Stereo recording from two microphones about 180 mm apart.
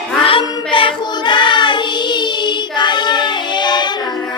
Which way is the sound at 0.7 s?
30° left (ahead or behind).